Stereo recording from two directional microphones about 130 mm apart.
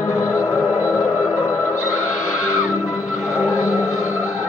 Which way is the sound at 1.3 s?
25° left (ahead or behind).